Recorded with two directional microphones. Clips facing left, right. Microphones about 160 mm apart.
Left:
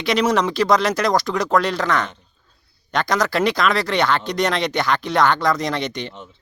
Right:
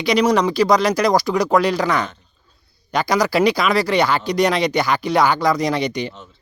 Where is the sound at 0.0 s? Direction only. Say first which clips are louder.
Right 2 dB; centre (ahead or behind).